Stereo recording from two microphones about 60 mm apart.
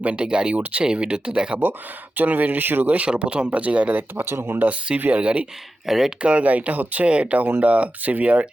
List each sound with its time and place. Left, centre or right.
0.0 s speech: centre
2.1 s speech: right
5.8 s speech: centre
6.2 s speech: right